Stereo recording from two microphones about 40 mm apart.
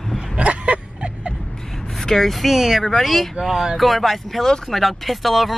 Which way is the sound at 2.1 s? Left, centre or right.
Centre.